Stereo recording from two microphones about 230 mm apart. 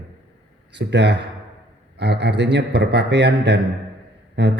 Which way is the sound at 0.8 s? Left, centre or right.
Right.